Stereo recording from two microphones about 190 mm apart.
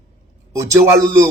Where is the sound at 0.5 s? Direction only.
15° right (ahead or behind).